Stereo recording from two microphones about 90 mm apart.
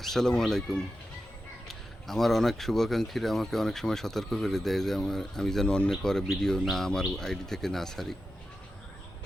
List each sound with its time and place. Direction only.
0.0 s speech: 5° left (ahead or behind)